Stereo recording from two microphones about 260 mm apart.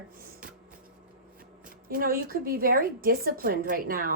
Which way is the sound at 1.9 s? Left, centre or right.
Right.